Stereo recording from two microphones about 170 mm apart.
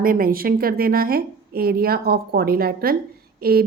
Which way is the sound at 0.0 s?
55° right (ahead or behind).